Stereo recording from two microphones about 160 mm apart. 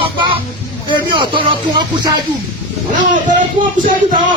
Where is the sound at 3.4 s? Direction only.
55° right (ahead or behind).